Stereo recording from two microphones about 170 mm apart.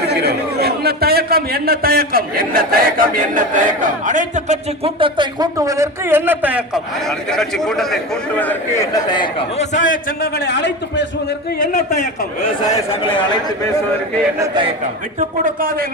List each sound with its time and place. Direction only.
0.1 s a man's voice: 75° right (ahead or behind); by 6.8 s 10° right (ahead or behind)
7.3 s a man's voice: centre (ahead or behind)
8.4 s a man's voice: 15° left (ahead or behind); by 9.6 s 30° left (ahead or behind)
9.7 s a man's voice: 50° left (ahead or behind)
10.3 s a man's voice: 90° left
11.6 s a man's voice: 45° left (ahead or behind)
12.7 s a man's voice: 30° left (ahead or behind)
15.4 s a man's voice: 60° right (ahead or behind)